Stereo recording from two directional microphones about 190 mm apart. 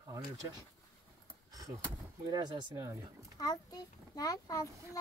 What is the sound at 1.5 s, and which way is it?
Speech, 20° right (ahead or behind).